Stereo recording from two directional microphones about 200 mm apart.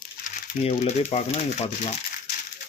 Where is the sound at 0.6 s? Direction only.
35° left (ahead or behind).